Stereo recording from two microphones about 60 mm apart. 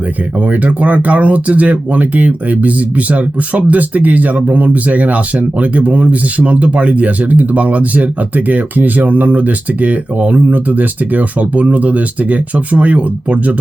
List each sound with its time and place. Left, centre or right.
0.3 s speech: right